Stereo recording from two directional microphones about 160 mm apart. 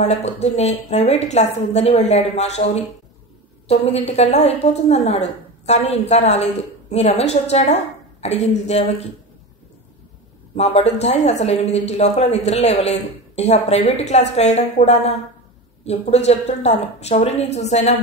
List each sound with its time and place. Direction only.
0.0 s a woman's voice: 45° left (ahead or behind)
10.5 s a woman's voice: 40° left (ahead or behind)